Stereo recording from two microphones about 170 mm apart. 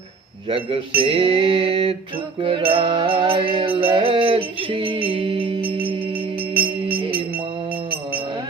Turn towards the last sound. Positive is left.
turn(degrees=-65)  # may be behind; listen again after turning